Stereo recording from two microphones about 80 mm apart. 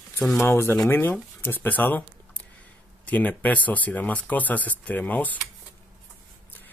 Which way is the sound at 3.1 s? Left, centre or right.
Left.